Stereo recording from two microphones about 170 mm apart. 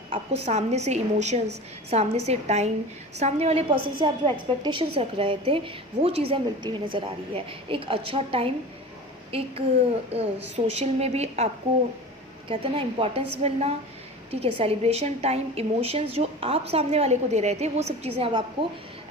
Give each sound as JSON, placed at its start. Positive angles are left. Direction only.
{"t": 0.1, "sound": "a woman's voice", "side_deg": -40}
{"t": 10.1, "sound": "a woman's voice", "side_deg": -40}